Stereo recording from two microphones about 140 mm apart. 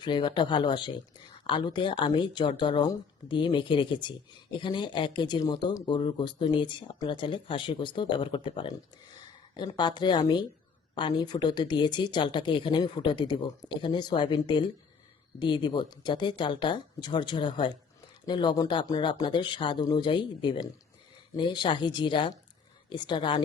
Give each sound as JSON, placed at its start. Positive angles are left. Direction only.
{"t": 0.0, "sound": "speech", "side_deg": 35}